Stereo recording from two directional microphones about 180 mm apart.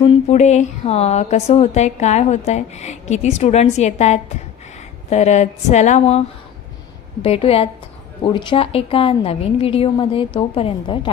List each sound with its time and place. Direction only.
0.0 s a woman's voice: 40° left (ahead or behind)